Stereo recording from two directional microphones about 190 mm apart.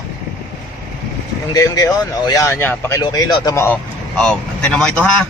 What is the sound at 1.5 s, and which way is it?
Speech, 15° left (ahead or behind).